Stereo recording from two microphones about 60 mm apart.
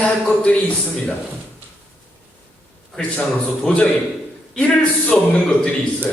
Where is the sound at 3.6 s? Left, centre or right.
Centre.